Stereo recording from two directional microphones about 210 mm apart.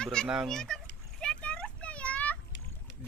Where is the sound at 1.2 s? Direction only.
5° left (ahead or behind).